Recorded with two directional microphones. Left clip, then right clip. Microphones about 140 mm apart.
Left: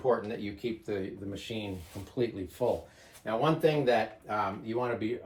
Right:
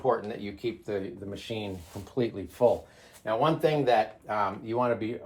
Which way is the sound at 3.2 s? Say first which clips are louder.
Right 2 dB; 35° right (ahead or behind).